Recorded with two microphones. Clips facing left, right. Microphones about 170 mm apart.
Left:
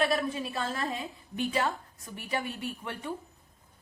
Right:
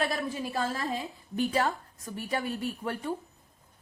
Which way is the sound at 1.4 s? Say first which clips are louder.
Right 2 dB; 40° right (ahead or behind).